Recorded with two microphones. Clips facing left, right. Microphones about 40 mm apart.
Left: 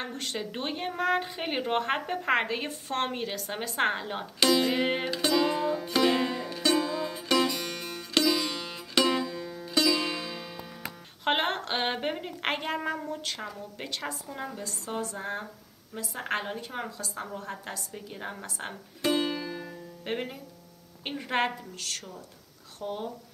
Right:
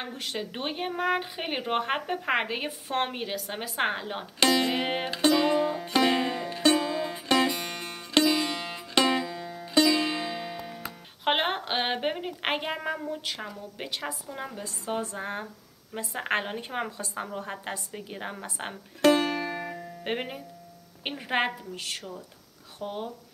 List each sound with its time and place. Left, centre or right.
0.0 s speech: centre
4.4 s a woman's voice: right
4.7 s speech: centre
5.2 s music: right
11.2 s speech: centre
14.6 s a woman's voice: right
18.9 s music: right
20.0 s speech: right
21.1 s speech: centre